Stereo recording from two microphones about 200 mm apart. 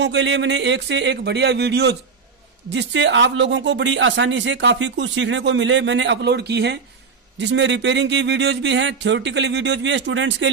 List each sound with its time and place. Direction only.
0.0 s speech: 60° right (ahead or behind)